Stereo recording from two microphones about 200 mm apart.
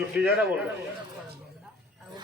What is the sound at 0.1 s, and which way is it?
Speech, 5° right (ahead or behind).